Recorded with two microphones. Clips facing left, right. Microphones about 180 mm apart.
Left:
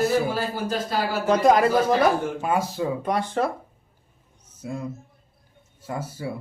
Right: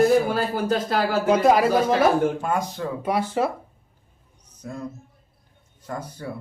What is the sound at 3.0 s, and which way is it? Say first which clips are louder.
Speech: right 4 dB; 5° right (ahead or behind).